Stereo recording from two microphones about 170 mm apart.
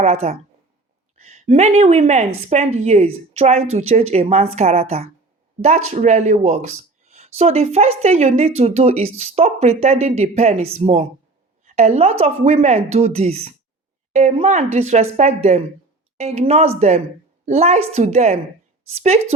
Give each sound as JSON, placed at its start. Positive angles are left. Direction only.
{"t": 0.0, "sound": "speech", "side_deg": -40}